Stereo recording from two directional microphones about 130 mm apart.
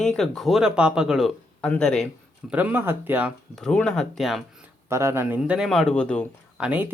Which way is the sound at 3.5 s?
5° left (ahead or behind).